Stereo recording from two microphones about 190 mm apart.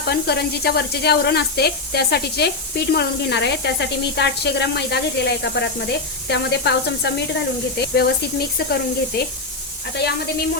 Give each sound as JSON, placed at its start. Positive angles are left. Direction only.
{"t": 0.1, "sound": "speech", "side_deg": 55}